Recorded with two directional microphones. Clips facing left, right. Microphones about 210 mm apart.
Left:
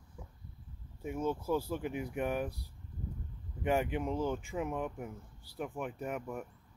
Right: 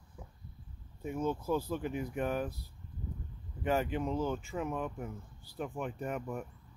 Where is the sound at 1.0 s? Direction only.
10° left (ahead or behind).